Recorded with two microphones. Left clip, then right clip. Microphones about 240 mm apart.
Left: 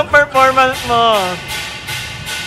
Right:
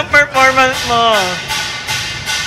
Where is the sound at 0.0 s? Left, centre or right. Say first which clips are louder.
Even; centre.